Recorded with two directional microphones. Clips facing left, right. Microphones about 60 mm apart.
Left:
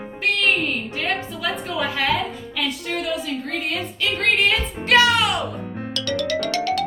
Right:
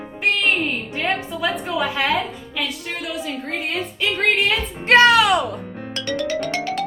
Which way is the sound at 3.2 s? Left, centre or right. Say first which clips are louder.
Even; right.